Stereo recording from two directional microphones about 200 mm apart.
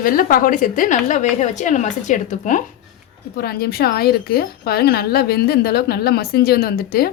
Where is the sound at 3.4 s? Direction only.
50° left (ahead or behind).